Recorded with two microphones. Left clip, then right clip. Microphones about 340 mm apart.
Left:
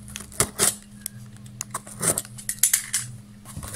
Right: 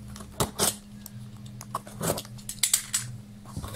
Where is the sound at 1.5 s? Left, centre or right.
Left.